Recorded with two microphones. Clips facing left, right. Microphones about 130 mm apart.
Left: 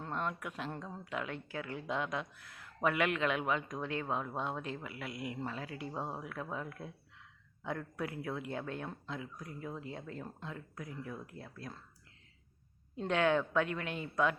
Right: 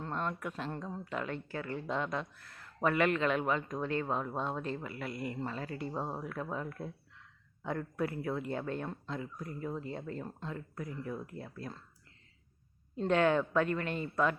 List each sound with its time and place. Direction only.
0.0 s speech: 5° left (ahead or behind)
13.0 s speech: centre (ahead or behind)